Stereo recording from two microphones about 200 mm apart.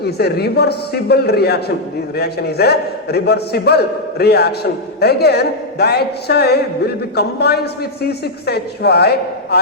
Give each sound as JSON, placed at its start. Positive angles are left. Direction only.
{"t": 0.0, "sound": "a man's voice", "side_deg": 55}